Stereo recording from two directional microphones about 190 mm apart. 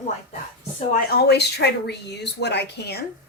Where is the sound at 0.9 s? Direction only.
55° left (ahead or behind).